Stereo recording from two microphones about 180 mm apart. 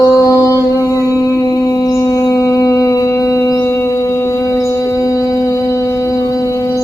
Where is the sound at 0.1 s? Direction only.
20° left (ahead or behind).